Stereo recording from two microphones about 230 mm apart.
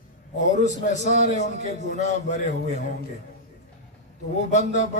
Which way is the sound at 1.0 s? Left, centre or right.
Right.